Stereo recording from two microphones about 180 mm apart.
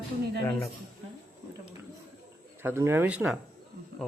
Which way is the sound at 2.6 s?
15° right (ahead or behind).